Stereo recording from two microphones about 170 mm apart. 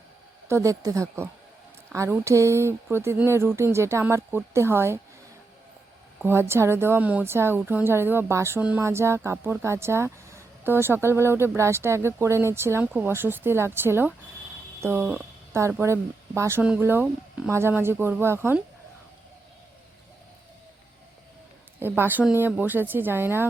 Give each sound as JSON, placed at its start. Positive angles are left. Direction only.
{"t": 0.4, "sound": "speech", "side_deg": -15}
{"t": 6.2, "sound": "speech", "side_deg": -15}
{"t": 21.8, "sound": "speech", "side_deg": -10}